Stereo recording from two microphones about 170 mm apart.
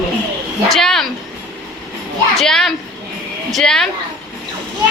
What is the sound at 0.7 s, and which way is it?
Speech, centre (ahead or behind).